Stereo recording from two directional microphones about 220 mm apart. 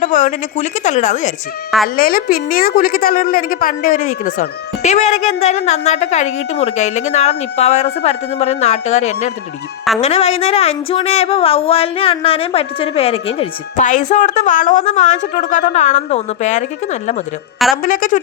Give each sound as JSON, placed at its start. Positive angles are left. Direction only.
{"t": 0.0, "sound": "a woman's voice", "side_deg": 35}